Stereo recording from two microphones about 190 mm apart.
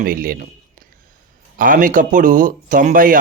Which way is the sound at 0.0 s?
50° right (ahead or behind).